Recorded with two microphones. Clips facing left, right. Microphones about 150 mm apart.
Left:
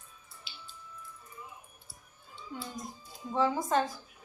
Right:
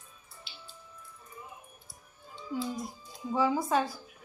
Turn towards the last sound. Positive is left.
turn(degrees=-5)  # may be behind; listen again after turning